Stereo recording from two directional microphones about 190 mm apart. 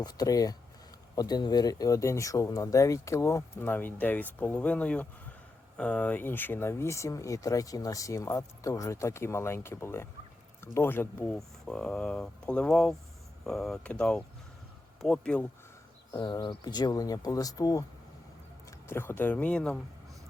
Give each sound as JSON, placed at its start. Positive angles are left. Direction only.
{"t": 0.0, "sound": "speech", "side_deg": 20}
{"t": 16.1, "sound": "speech", "side_deg": 20}
{"t": 18.9, "sound": "speech", "side_deg": 10}